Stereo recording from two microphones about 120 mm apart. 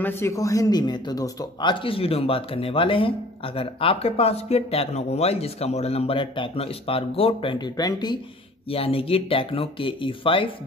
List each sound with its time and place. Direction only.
0.0 s a man's voice: 20° left (ahead or behind); by 7.5 s 50° left (ahead or behind)
7.5 s speech: 35° left (ahead or behind)
8.6 s a man's voice: 50° left (ahead or behind)